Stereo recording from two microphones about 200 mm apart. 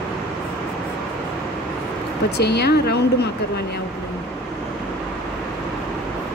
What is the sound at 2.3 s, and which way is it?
Speech, 55° left (ahead or behind).